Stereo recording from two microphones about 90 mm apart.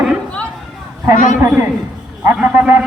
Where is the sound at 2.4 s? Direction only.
20° right (ahead or behind).